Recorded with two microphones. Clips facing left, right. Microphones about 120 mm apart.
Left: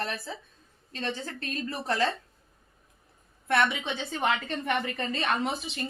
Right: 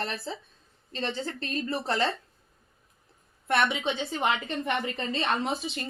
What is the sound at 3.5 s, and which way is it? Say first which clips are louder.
A woman's voice: even; 20° right (ahead or behind).